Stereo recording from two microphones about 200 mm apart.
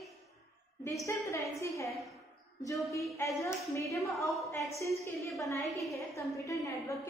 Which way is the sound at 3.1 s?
15° left (ahead or behind).